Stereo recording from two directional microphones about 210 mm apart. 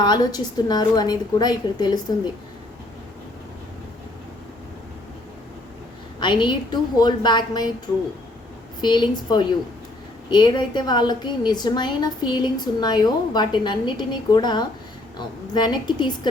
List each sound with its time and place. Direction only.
0.0 s a woman's voice: 20° left (ahead or behind)
6.1 s a woman's voice: 20° left (ahead or behind)
8.8 s a woman's voice: 20° left (ahead or behind)